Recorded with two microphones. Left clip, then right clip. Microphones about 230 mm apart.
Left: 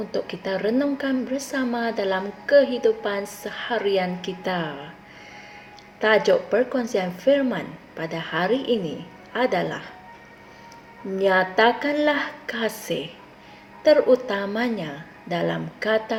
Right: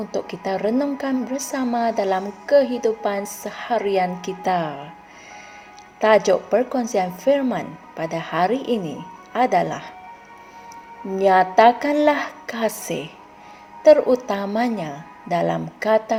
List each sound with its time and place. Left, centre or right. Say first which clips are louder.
0.1 s a woman's voice: right 3 dB; right
6.0 s a woman's voice: right 3 dB; right
11.2 s a woman's voice: right 5 dB; right